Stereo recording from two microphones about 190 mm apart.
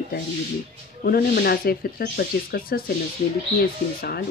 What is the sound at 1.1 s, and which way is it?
Speech, 55° left (ahead or behind).